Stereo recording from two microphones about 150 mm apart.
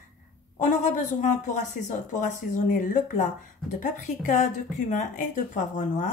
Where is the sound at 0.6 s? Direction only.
55° left (ahead or behind).